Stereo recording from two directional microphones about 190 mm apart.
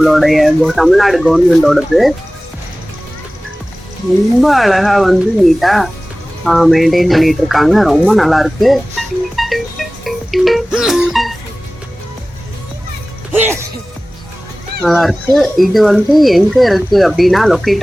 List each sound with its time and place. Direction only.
0.0 s speech: centre (ahead or behind)
4.4 s speech: centre (ahead or behind)
13.3 s music: 10° right (ahead or behind)
14.8 s speech: centre (ahead or behind)